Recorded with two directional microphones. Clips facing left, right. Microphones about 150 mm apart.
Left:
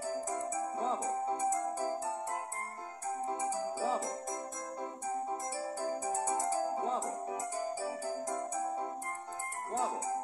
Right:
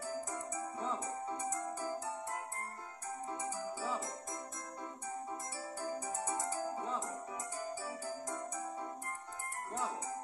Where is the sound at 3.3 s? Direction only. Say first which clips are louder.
Left 5 dB; 35° left (ahead or behind).